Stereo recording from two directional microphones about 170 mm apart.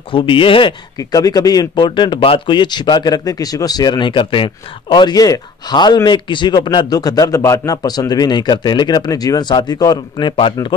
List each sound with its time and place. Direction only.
0.1 s speech: 30° left (ahead or behind)